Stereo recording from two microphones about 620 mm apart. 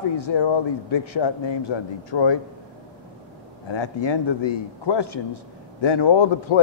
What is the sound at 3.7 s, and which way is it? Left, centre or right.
A man's voice, left.